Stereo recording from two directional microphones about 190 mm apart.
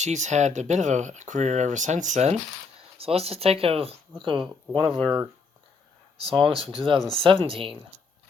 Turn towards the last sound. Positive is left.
turn(degrees=-30)  # may be behind; listen again after turning